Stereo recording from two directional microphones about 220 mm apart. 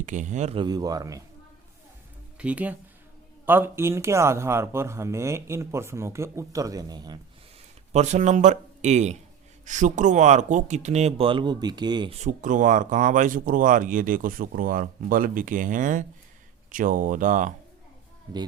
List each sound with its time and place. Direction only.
0.0 s speech: 35° right (ahead or behind); by 1.2 s 15° right (ahead or behind)
2.4 s speech: 5° right (ahead or behind)
7.9 s speech: 30° right (ahead or behind)
12.2 s speech: 35° right (ahead or behind)